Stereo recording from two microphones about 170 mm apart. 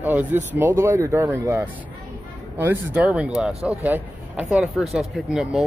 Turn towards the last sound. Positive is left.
turn(degrees=0)  # may be behind; listen again after turning